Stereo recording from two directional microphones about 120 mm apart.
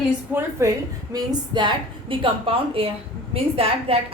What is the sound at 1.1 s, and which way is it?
A woman's voice, 35° right (ahead or behind).